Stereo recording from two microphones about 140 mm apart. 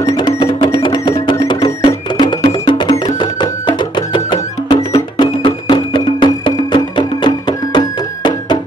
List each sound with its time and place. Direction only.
0.0 s music: 30° left (ahead or behind)